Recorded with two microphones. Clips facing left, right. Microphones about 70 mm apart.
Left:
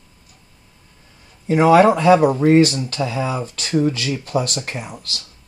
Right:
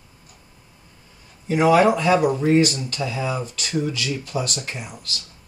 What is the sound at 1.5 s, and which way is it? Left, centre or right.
Speech, left.